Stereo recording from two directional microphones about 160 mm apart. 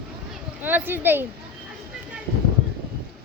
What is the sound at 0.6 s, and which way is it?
Speech, 10° right (ahead or behind).